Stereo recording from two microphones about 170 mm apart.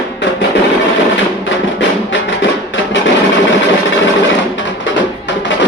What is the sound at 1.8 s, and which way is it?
Music, 90° left.